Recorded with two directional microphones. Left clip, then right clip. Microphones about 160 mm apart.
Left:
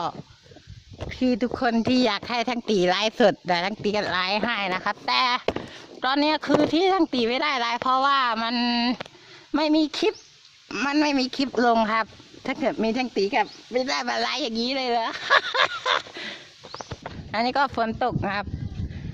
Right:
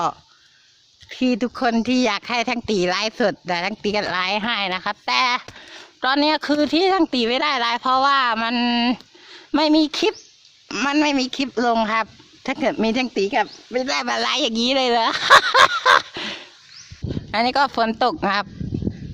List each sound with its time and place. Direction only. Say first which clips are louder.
1.1 s a woman's voice: right 3 dB; 5° right (ahead or behind); by 16.4 s 20° right (ahead or behind)
17.3 s speech: right 4 dB; 5° right (ahead or behind)